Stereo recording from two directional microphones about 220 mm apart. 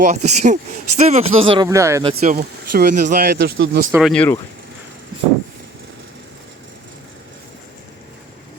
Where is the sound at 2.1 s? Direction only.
45° right (ahead or behind).